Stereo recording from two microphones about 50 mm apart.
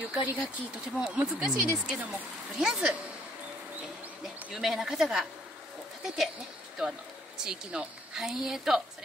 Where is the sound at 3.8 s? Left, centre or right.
Centre.